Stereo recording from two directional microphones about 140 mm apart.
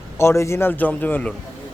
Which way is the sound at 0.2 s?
20° left (ahead or behind).